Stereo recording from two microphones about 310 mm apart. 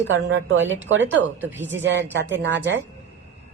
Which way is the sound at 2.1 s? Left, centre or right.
Right.